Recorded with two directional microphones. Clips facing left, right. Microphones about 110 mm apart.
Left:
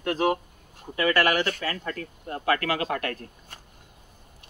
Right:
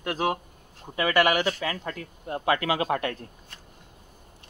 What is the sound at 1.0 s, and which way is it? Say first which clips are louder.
Speech: even; 15° right (ahead or behind).